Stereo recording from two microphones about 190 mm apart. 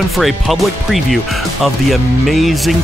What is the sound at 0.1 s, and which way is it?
Speech, centre (ahead or behind).